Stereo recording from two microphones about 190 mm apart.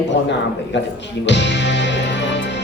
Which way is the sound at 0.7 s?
70° left (ahead or behind).